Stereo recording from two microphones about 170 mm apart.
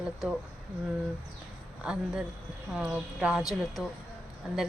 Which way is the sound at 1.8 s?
5° right (ahead or behind).